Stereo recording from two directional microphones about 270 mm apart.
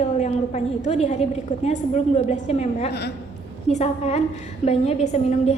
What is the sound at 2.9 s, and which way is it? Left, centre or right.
Speech, left.